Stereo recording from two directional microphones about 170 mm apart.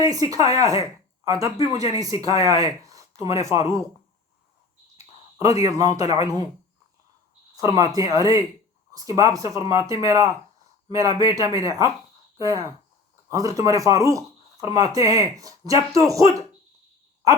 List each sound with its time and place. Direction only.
0.0 s speech: 20° right (ahead or behind)
5.4 s speech: 20° right (ahead or behind)
7.5 s speech: 20° right (ahead or behind)